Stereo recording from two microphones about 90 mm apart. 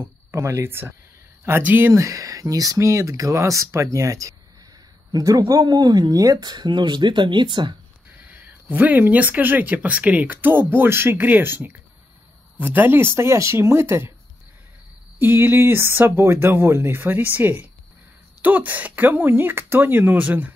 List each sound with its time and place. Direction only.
0.3 s speech: 30° right (ahead or behind); by 7.7 s 55° right (ahead or behind)
8.2 s speech: 20° right (ahead or behind)
15.1 s speech: 25° right (ahead or behind)